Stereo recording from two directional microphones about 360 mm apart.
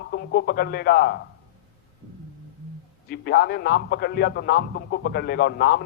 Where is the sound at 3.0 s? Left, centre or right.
Left.